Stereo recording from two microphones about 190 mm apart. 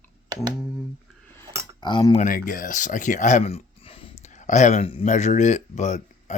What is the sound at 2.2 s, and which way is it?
Speech, 45° left (ahead or behind).